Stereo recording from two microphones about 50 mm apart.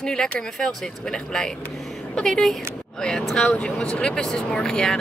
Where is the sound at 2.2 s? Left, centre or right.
Centre.